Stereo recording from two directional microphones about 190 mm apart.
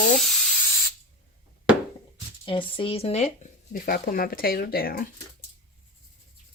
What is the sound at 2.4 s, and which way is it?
Speech, 25° left (ahead or behind).